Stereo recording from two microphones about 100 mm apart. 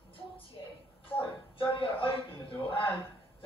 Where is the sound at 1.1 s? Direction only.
60° left (ahead or behind).